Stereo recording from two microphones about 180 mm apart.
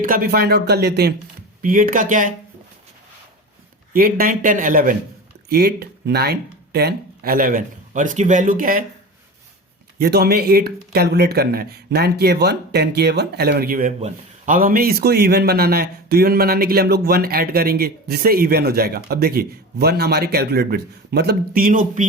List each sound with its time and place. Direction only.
0.0 s a man's voice: 50° right (ahead or behind)
1.6 s speech: 50° right (ahead or behind)
3.9 s speech: 50° right (ahead or behind)
10.0 s a man's voice: 60° right (ahead or behind)